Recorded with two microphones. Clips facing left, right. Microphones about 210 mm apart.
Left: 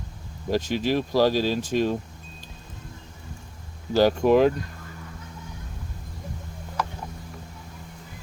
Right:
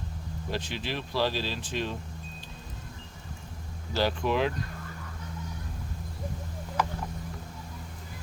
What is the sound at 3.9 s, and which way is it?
Speech, 45° left (ahead or behind).